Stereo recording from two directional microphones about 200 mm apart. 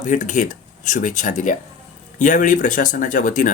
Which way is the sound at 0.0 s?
40° left (ahead or behind).